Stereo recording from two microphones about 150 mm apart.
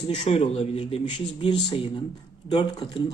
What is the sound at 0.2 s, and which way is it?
Speech, 45° left (ahead or behind).